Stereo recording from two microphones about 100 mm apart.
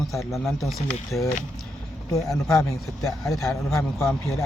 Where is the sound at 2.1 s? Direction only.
35° left (ahead or behind).